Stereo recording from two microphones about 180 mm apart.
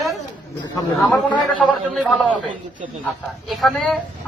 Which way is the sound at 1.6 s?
5° left (ahead or behind).